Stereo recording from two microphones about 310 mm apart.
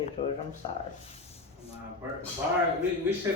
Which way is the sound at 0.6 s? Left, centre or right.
Centre.